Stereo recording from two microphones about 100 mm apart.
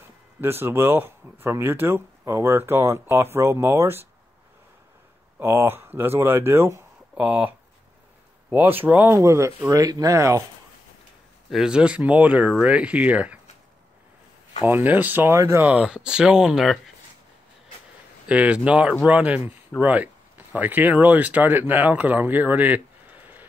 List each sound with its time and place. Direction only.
0.4 s speech: 20° right (ahead or behind)
5.4 s speech: 25° right (ahead or behind)
9.1 s speech: 30° right (ahead or behind)
11.5 s speech: 10° right (ahead or behind)
14.7 s speech: 20° right (ahead or behind)
15.7 s speech: 10° right (ahead or behind)
18.2 s speech: 10° right (ahead or behind)